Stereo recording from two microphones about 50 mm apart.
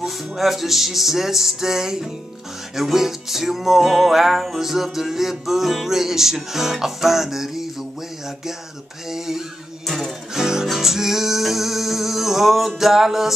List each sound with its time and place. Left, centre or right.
0.0 s music: centre
9.1 s a sound: centre
9.8 s music: centre